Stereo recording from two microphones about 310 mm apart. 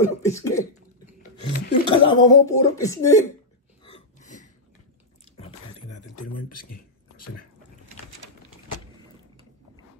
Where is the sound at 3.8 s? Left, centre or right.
Left.